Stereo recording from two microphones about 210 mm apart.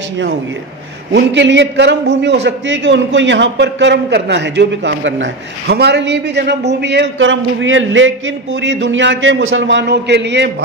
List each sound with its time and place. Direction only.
1.1 s a man's voice: 55° right (ahead or behind)